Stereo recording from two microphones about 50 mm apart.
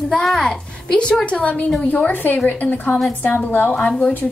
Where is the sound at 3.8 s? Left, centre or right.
Left.